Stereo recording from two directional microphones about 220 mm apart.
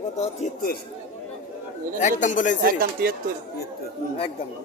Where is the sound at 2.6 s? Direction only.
40° right (ahead or behind).